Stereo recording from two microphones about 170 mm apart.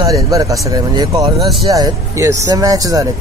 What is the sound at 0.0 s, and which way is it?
Speech, 20° right (ahead or behind).